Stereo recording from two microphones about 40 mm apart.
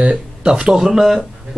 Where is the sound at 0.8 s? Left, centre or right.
Centre.